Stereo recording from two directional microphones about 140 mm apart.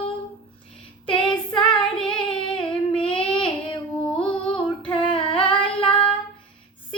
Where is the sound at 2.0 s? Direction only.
5° left (ahead or behind).